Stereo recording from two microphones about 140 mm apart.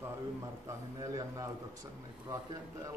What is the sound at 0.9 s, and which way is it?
A man's voice, 25° right (ahead or behind).